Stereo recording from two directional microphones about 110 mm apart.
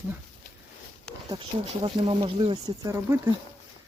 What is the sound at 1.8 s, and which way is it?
Speech, 50° right (ahead or behind).